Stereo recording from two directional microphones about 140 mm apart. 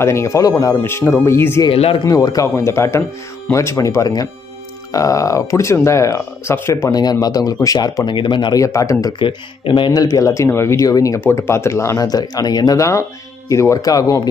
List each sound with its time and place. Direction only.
0.0 s speech: 20° left (ahead or behind)
1.7 s speech: 40° left (ahead or behind)
2.0 s speech: 25° left (ahead or behind)
9.2 s speech: 35° left (ahead or behind)